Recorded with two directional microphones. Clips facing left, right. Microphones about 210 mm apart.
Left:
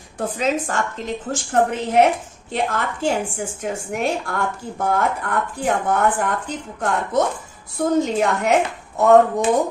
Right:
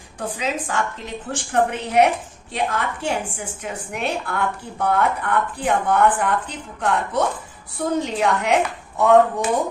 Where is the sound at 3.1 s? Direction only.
45° left (ahead or behind).